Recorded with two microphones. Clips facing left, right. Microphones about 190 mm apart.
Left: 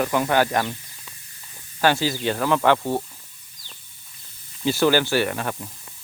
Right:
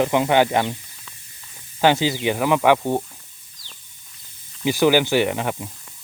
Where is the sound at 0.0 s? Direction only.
20° right (ahead or behind).